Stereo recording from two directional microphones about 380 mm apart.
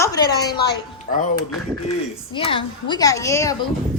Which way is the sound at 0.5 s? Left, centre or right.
Left.